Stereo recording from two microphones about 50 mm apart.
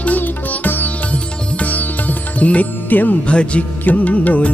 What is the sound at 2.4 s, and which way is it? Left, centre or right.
Music, left.